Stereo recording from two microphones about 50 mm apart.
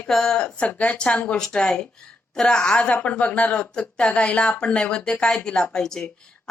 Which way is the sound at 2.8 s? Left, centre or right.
Left.